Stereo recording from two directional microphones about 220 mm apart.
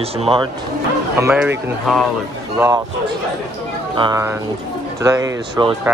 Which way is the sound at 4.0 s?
15° right (ahead or behind).